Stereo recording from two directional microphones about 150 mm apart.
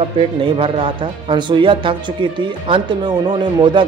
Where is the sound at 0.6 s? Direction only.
35° right (ahead or behind).